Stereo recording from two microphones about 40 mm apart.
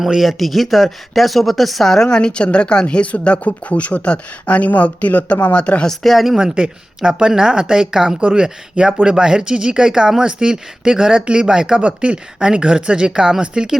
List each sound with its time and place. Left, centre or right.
0.0 s speech: centre
2.0 s speech: left
6.0 s speech: centre
6.3 s speech: centre